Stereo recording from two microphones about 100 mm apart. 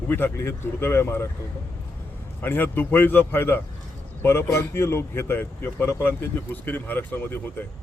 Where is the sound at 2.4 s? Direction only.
20° left (ahead or behind).